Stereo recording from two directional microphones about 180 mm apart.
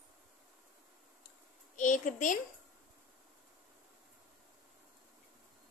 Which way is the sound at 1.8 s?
45° left (ahead or behind).